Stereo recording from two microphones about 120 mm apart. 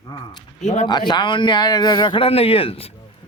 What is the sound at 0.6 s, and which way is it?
Speech, 75° left (ahead or behind).